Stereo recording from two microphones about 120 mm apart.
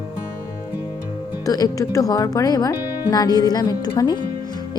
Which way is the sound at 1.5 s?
30° left (ahead or behind).